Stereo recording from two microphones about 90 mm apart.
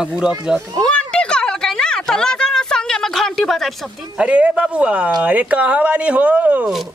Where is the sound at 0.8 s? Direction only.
10° left (ahead or behind).